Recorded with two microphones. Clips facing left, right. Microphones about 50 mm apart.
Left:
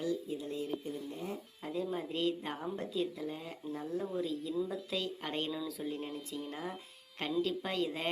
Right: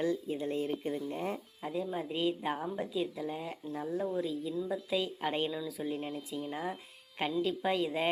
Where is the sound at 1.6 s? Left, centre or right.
Centre.